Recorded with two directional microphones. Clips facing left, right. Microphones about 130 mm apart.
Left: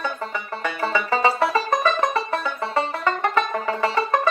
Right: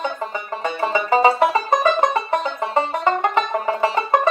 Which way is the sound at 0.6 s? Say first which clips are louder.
Right 3 dB; 20° right (ahead or behind).